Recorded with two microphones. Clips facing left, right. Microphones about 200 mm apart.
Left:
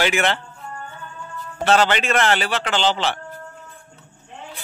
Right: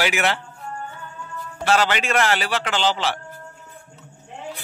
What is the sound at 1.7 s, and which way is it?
A man's voice, 25° left (ahead or behind).